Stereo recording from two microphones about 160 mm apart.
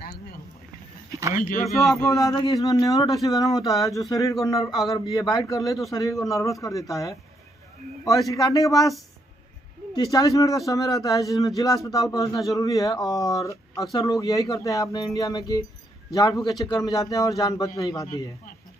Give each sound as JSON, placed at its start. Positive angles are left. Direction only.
{"t": 1.7, "sound": "a man's voice", "side_deg": 0}
{"t": 2.0, "sound": "speech", "side_deg": 20}
{"t": 8.3, "sound": "speech", "side_deg": 20}
{"t": 9.9, "sound": "speech", "side_deg": 20}
{"t": 12.2, "sound": "a man's voice", "side_deg": 0}
{"t": 12.5, "sound": "speech", "side_deg": 20}